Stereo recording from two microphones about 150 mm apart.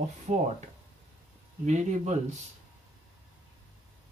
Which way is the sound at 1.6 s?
50° right (ahead or behind).